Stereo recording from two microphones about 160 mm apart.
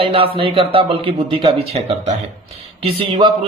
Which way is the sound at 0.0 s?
35° right (ahead or behind).